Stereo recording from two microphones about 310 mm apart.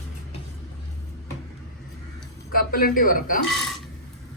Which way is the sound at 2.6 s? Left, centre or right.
Left.